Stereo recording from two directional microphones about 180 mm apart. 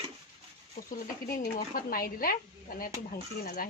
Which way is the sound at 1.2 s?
55° left (ahead or behind).